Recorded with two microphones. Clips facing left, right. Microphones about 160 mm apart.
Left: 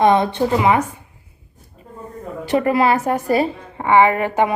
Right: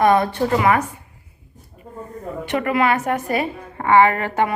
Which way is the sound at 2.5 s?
35° left (ahead or behind).